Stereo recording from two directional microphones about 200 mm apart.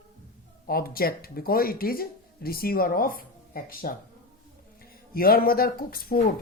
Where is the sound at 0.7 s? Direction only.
50° left (ahead or behind).